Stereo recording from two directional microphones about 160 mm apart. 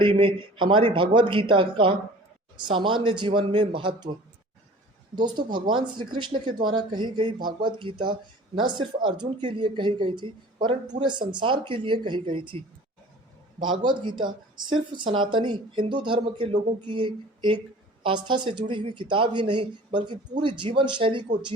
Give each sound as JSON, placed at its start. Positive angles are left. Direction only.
{"t": 0.0, "sound": "speech", "side_deg": -30}
{"t": 5.1, "sound": "speech", "side_deg": -30}